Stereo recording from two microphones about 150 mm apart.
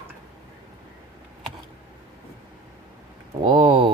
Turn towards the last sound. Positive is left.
turn(degrees=-35)  # may be behind; listen again after turning